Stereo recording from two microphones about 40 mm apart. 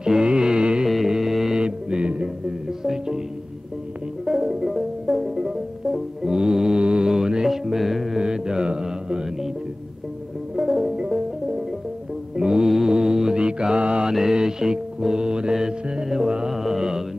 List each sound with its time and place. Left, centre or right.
0.0 s music: right
0.8 s music: centre
1.6 s music: right
2.8 s music: centre
4.3 s music: centre
6.8 s mantra: right
7.4 s music: centre
8.2 s mantra: centre
10.5 s music: centre
12.6 s mantra: centre; by 14.1 s right
14.1 s music: centre
16.5 s mantra: centre